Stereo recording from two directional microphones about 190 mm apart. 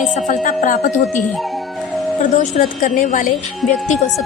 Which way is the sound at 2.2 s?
45° left (ahead or behind).